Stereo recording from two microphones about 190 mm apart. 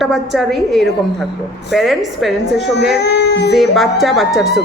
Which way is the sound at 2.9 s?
60° left (ahead or behind).